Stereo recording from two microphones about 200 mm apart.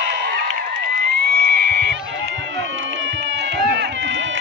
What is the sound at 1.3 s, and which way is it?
Goat, 50° right (ahead or behind).